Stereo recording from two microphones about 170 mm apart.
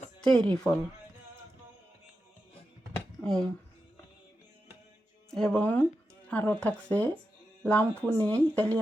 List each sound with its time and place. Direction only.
0.2 s speech: 5° left (ahead or behind)
3.2 s speech: 5° left (ahead or behind)
5.3 s speech: 5° left (ahead or behind)